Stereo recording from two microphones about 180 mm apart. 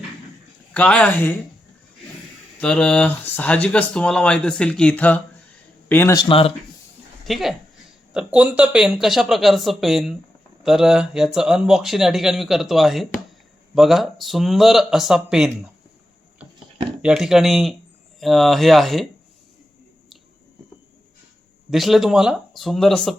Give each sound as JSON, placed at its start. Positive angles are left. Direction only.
{"t": 0.7, "sound": "speech", "side_deg": 5}
{"t": 2.6, "sound": "speech", "side_deg": 5}
{"t": 6.1, "sound": "speech", "side_deg": 30}
{"t": 7.3, "sound": "speech", "side_deg": 0}
{"t": 17.0, "sound": "speech", "side_deg": -5}
{"t": 21.7, "sound": "speech", "side_deg": 0}